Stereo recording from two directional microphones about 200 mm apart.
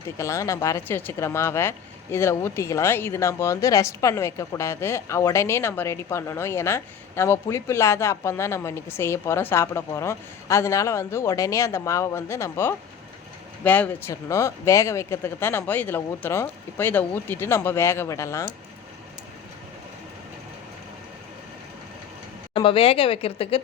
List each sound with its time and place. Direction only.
0.2 s speech: 15° left (ahead or behind)
22.5 s speech: 25° left (ahead or behind)